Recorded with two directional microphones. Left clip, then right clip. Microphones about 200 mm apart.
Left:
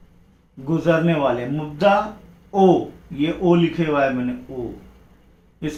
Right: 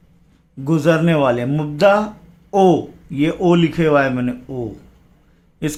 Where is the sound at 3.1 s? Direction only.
55° right (ahead or behind).